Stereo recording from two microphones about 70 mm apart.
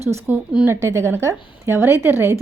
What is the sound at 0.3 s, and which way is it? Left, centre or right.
Speech, right.